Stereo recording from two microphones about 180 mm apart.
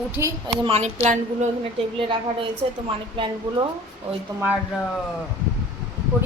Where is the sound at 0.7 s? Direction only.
35° right (ahead or behind).